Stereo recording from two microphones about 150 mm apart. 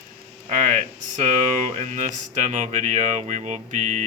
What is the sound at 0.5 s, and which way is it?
Speech, 55° right (ahead or behind).